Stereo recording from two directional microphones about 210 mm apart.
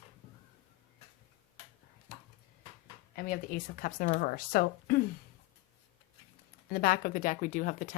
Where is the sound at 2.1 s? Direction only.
40° left (ahead or behind).